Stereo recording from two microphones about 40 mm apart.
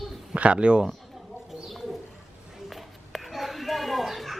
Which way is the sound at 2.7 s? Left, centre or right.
Centre.